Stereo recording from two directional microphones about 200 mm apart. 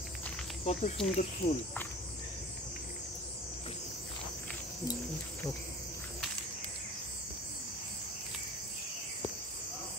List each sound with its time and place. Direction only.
0.7 s speech: 35° left (ahead or behind)